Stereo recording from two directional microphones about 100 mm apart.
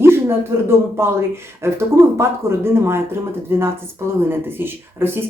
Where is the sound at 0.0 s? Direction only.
25° right (ahead or behind).